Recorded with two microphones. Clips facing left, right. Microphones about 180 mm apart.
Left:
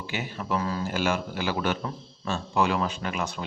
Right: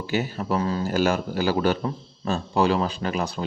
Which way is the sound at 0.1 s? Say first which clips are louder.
Right 5 dB; 40° right (ahead or behind).